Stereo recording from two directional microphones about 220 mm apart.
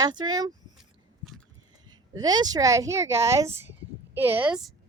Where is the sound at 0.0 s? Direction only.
20° right (ahead or behind).